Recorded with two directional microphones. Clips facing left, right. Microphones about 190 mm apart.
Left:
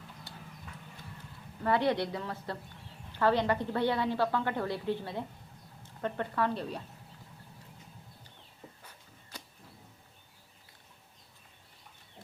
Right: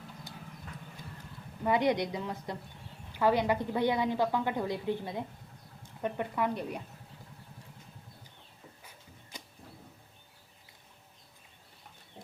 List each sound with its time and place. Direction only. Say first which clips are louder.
1.6 s a woman's voice: right 1 dB; 15° right (ahead or behind)
8.8 s music: right 1 dB; 10° right (ahead or behind)